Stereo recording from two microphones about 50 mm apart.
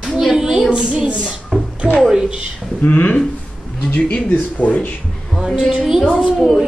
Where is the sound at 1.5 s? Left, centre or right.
Centre.